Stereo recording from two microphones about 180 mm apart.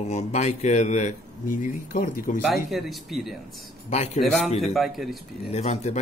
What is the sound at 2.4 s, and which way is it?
Speech, centre (ahead or behind).